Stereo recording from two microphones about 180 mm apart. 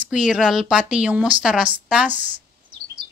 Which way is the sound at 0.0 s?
5° right (ahead or behind).